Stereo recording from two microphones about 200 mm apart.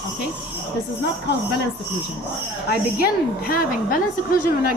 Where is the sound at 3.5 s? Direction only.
45° left (ahead or behind).